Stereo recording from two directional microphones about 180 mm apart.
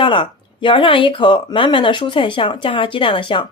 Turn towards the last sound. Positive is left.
turn(degrees=25)  # may be behind; listen again after turning